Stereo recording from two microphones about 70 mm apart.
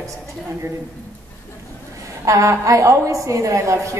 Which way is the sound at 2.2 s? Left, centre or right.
Right.